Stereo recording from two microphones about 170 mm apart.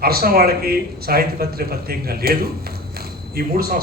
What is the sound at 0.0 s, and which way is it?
Speech, 65° right (ahead or behind).